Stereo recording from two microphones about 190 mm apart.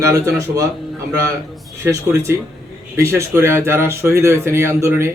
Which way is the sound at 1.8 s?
15° right (ahead or behind).